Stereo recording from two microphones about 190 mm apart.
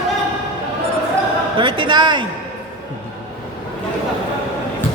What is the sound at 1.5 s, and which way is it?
Speech, 25° right (ahead or behind).